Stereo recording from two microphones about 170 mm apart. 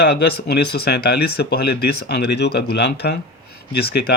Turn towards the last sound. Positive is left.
turn(degrees=70)  # may be behind; listen again after turning